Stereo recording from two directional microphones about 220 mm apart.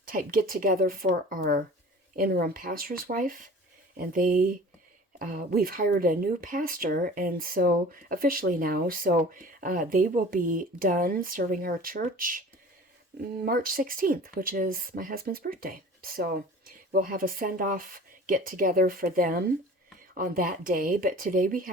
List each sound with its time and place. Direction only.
0.0 s speech: 40° right (ahead or behind)